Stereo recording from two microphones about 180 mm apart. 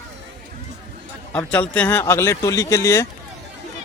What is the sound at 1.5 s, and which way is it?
Speech, 5° left (ahead or behind).